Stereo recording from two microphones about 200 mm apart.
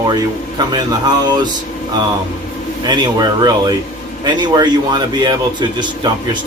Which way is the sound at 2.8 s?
20° right (ahead or behind).